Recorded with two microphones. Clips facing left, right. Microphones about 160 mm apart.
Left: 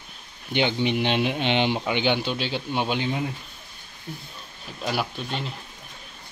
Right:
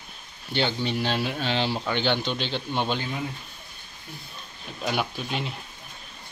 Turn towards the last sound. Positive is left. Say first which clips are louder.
# even
turn(degrees=0)  # may be behind; listen again after turning